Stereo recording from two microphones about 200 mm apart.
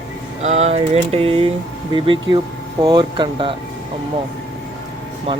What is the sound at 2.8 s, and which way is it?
Speech, 20° right (ahead or behind).